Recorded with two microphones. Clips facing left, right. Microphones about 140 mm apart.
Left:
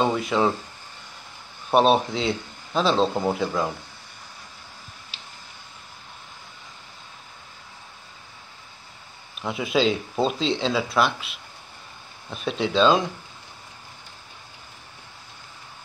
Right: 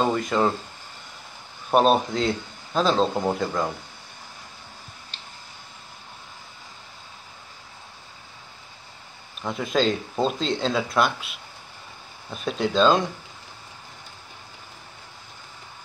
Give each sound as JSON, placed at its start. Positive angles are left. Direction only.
{"t": 0.0, "sound": "a man's voice", "side_deg": 0}
{"t": 1.7, "sound": "a man's voice", "side_deg": 0}
{"t": 9.4, "sound": "a man's voice", "side_deg": 5}